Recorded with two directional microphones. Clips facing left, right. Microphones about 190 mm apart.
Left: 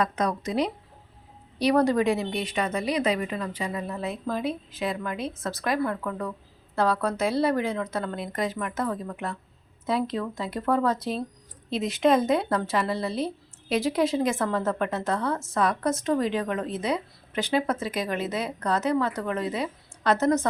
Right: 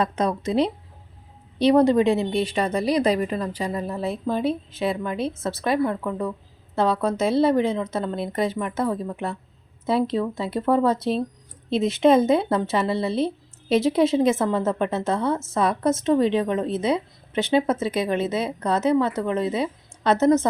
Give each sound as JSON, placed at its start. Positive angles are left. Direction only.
{"t": 0.0, "sound": "speech", "side_deg": -25}